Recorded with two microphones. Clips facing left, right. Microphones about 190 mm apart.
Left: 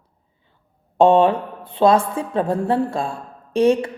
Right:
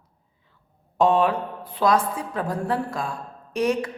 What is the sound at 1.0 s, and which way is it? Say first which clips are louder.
A woman's voice: left 6 dB; 25° left (ahead or behind).